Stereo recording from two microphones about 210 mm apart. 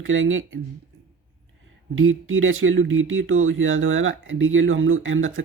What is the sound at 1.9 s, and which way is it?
Speech, 75° right (ahead or behind).